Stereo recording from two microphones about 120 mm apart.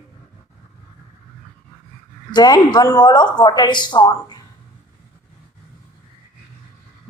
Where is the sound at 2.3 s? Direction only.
35° left (ahead or behind).